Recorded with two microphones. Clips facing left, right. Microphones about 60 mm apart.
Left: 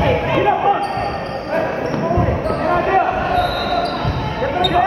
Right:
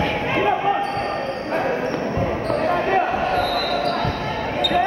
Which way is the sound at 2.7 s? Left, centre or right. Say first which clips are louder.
Left 5 dB; centre.